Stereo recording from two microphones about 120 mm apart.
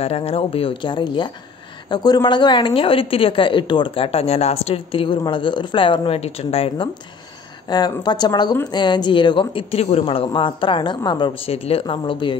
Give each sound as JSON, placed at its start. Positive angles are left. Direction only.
{"t": 0.0, "sound": "a woman's voice", "side_deg": 55}
{"t": 7.6, "sound": "a woman's voice", "side_deg": 35}
{"t": 11.5, "sound": "a woman's voice", "side_deg": 55}